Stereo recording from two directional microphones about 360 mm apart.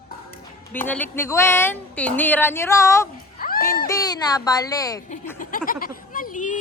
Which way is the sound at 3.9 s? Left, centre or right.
Centre.